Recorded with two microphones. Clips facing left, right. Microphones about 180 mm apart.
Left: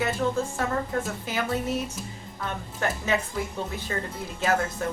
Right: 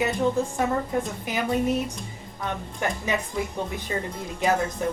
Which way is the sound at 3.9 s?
10° right (ahead or behind).